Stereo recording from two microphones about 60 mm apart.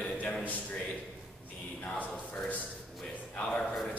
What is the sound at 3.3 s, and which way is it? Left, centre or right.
Speech, left.